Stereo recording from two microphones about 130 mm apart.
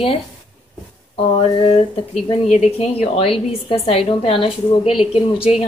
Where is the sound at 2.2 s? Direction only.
55° left (ahead or behind).